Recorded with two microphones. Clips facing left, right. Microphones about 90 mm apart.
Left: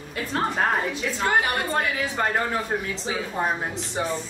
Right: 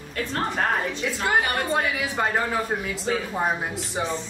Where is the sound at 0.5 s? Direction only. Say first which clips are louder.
Left 1 dB; 5° left (ahead or behind).